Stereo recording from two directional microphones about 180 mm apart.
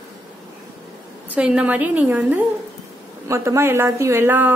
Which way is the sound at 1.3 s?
5° right (ahead or behind).